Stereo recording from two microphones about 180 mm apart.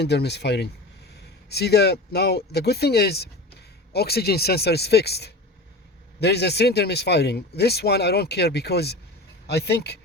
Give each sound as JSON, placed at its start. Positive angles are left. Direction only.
{"t": 0.0, "sound": "speech", "side_deg": 65}